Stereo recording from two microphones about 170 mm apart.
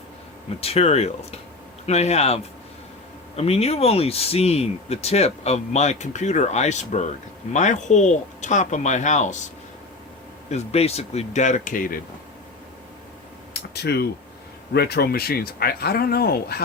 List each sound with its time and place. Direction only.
0.6 s speech: 35° left (ahead or behind)
10.5 s speech: 35° left (ahead or behind)
13.5 s a sound: 75° left (ahead or behind)
14.7 s speech: 70° left (ahead or behind)